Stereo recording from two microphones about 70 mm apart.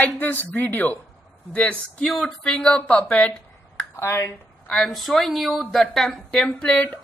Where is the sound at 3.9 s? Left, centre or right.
Left.